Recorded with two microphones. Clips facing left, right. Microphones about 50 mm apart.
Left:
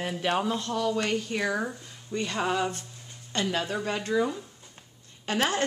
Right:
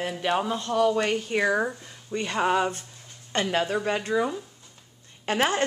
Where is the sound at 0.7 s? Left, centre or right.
Right.